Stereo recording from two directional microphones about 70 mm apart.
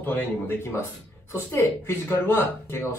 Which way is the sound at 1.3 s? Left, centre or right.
Left.